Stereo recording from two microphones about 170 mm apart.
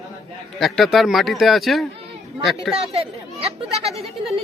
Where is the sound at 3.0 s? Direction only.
35° right (ahead or behind).